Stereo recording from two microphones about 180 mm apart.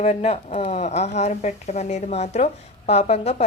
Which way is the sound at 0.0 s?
35° left (ahead or behind).